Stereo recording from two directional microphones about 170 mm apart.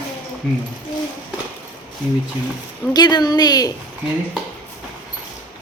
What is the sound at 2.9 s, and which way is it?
Speech, 25° left (ahead or behind).